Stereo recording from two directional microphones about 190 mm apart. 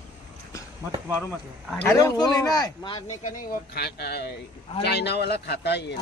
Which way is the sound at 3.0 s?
45° left (ahead or behind).